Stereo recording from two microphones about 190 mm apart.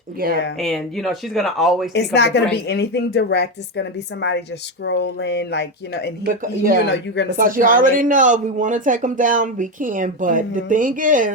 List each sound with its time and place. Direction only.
0.2 s speech: 50° right (ahead or behind)
0.6 s speech: centre (ahead or behind)
1.9 s a woman's voice: 60° left (ahead or behind)
6.2 s speech: 50° right (ahead or behind)
6.8 s a woman's voice: 65° left (ahead or behind)
7.3 s speech: 45° right (ahead or behind)